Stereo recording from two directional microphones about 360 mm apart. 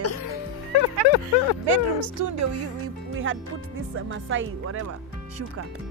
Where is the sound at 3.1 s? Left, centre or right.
Right.